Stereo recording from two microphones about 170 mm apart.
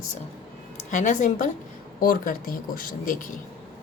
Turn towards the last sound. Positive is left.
turn(degrees=55)  # may be behind; listen again after turning